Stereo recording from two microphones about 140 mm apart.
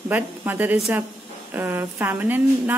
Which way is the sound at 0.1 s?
15° right (ahead or behind).